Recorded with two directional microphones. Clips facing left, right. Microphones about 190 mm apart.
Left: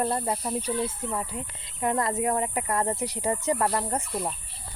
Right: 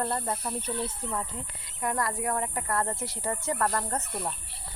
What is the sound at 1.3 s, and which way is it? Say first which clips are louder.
Speech: left 4 dB; 25° left (ahead or behind).